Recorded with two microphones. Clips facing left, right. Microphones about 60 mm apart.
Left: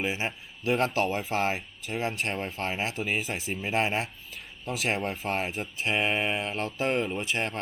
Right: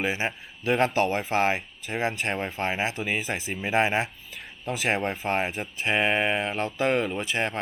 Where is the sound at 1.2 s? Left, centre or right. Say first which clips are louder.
Right 4 dB; centre.